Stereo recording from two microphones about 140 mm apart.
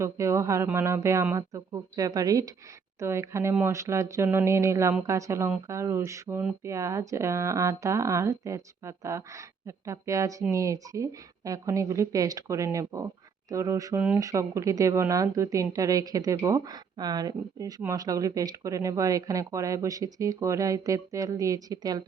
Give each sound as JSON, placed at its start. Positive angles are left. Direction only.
{"t": 0.0, "sound": "speech", "side_deg": -20}